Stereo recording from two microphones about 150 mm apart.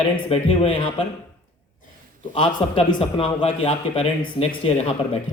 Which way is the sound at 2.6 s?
40° left (ahead or behind).